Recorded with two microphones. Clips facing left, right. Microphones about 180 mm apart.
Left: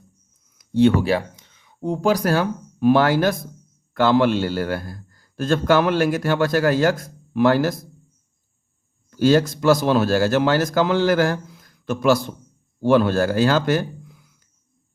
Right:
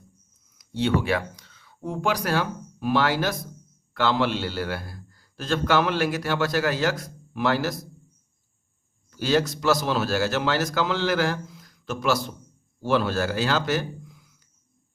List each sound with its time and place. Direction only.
0.6 s speech: 50° left (ahead or behind)
1.0 s speech: 30° left (ahead or behind)
1.5 s a sound: 20° left (ahead or behind)
1.9 s a man's voice: 40° left (ahead or behind)
9.0 s a man's voice: 45° left (ahead or behind)